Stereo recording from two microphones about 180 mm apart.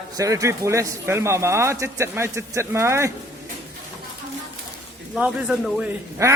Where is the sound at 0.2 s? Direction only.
20° right (ahead or behind).